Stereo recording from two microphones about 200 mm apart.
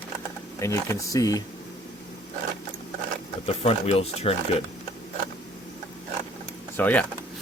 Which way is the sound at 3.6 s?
30° left (ahead or behind).